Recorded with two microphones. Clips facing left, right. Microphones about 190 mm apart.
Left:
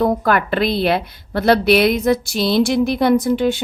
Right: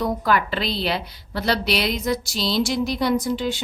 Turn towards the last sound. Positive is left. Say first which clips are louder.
# left 7 dB
turn(degrees=55)  # may be behind; listen again after turning